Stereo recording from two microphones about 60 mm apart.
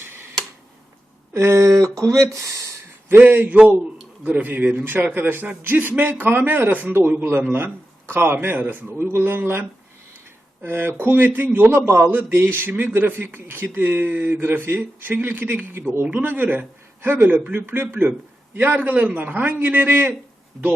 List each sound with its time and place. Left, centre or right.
1.3 s speech: right
3.1 s speech: right